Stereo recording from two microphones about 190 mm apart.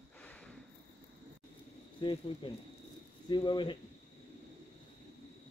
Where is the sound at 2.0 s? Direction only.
25° left (ahead or behind).